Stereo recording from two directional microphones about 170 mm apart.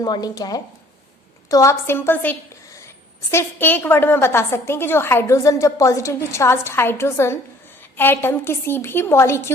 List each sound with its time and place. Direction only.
0.0 s a woman's voice: 20° left (ahead or behind)